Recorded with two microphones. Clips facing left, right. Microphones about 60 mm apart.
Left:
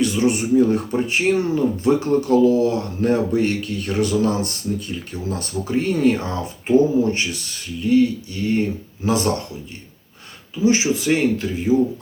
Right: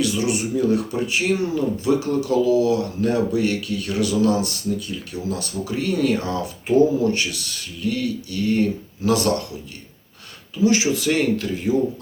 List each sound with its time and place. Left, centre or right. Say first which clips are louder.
0.0 s speech: left 3 dB; left
10.6 s speech: even; left